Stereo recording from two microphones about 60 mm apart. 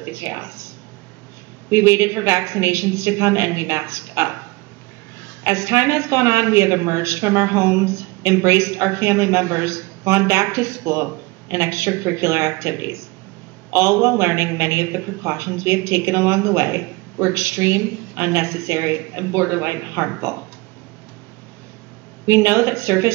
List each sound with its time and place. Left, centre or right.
0.3 s a man's voice: right
1.7 s a man's voice: right
5.4 s a man's voice: right
22.2 s a man's voice: right